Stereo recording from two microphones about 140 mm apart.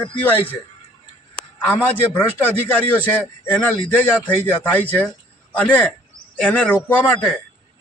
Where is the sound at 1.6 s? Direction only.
15° left (ahead or behind).